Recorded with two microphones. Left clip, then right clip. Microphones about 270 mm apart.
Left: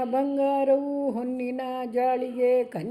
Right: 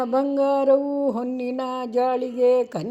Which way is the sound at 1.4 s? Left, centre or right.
Right.